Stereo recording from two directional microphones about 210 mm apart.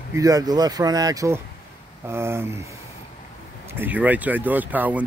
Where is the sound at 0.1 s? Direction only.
15° right (ahead or behind).